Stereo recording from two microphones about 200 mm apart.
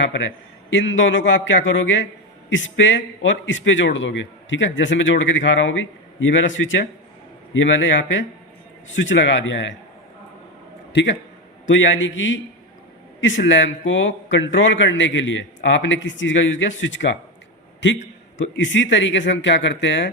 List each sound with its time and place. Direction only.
0.0 s a man's voice: 65° left (ahead or behind)
10.9 s a man's voice: 60° left (ahead or behind)